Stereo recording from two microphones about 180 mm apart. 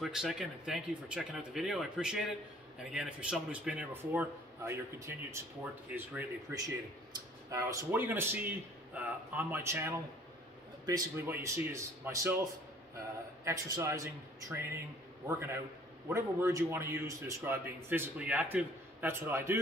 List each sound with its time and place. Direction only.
0.0 s a man's voice: centre (ahead or behind)
13.4 s a man's voice: 15° right (ahead or behind)